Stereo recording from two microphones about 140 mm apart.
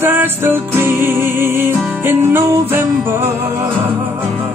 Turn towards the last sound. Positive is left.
turn(degrees=-15)  # may be behind; listen again after turning